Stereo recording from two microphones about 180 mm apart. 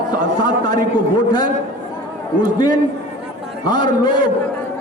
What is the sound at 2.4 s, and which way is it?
A man's voice, 25° left (ahead or behind).